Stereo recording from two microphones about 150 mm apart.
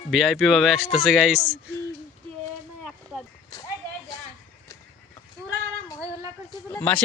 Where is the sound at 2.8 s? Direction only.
Centre (ahead or behind).